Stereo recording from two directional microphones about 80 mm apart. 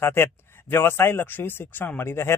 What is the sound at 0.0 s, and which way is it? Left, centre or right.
Speech, left.